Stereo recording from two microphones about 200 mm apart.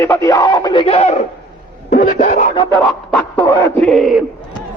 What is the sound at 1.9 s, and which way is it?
Speech, 45° left (ahead or behind).